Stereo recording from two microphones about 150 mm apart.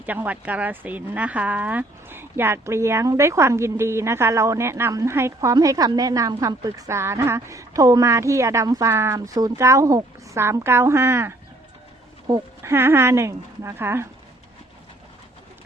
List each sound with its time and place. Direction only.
0.0 s speech: 10° right (ahead or behind)